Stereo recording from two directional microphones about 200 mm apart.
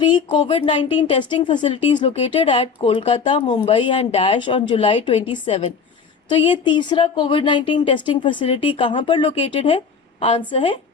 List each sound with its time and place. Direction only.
0.3 s speech: 30° left (ahead or behind)